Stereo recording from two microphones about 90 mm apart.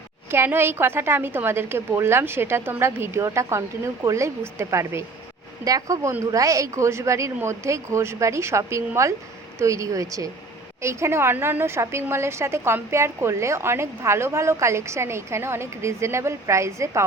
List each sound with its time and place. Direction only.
0.3 s a woman's voice: 25° right (ahead or behind)